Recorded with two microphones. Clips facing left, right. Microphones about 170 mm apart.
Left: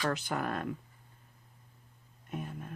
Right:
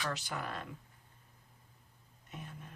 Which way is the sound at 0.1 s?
55° left (ahead or behind).